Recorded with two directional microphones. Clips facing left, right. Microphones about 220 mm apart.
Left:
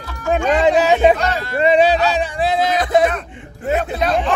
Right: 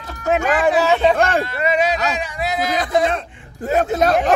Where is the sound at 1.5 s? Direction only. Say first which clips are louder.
Left 5 dB; 30° left (ahead or behind).